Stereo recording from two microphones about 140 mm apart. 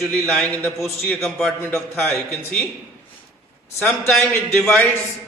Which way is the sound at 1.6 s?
15° left (ahead or behind).